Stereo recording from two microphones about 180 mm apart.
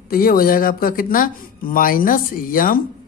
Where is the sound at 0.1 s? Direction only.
55° left (ahead or behind).